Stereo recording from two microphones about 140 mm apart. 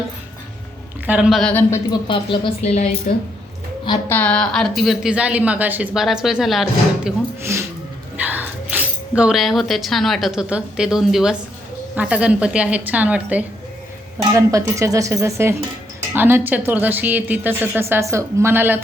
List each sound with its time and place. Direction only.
1.0 s a woman's voice: 10° right (ahead or behind)
1.4 s speech: 10° left (ahead or behind)
1.9 s speech: 35° left (ahead or behind)
2.6 s a woman's voice: 50° left (ahead or behind)
4.1 s a woman's voice: 10° left (ahead or behind)
7.5 s a sound: 20° right (ahead or behind)
8.1 s a woman's voice: 10° right (ahead or behind)
14.2 s a woman's voice: 20° right (ahead or behind)